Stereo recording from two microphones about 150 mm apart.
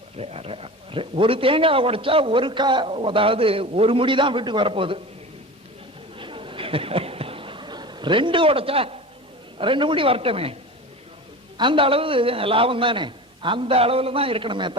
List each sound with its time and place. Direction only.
0.2 s a man's voice: 40° right (ahead or behind)
6.1 s a sound: 35° right (ahead or behind)
9.6 s a man's voice: 35° right (ahead or behind)